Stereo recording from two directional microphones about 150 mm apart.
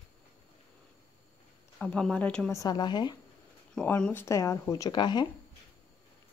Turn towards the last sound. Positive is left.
turn(degrees=30)  # may be behind; listen again after turning